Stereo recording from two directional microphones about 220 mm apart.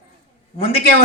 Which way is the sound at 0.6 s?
25° left (ahead or behind).